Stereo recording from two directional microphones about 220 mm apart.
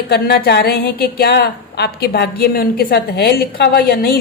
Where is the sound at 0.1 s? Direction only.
45° left (ahead or behind).